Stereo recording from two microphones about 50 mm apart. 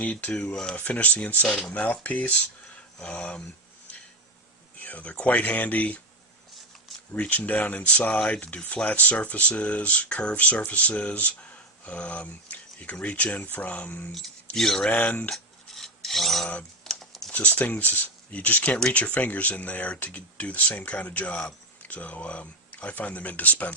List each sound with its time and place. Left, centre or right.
0.0 s speech: left
0.3 s speech: centre
0.9 s speech: left
4.8 s speech: left
7.2 s speech: left
14.5 s speech: centre
14.8 s speech: left
15.7 s filing: centre
16.8 s typing: centre
17.3 s speech: left